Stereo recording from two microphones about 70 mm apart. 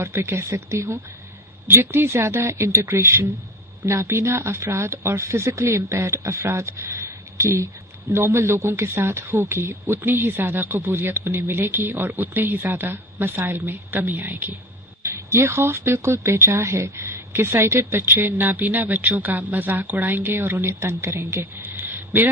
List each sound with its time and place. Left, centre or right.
0.0 s speech: right
1.6 s speech: right
15.0 s speech: right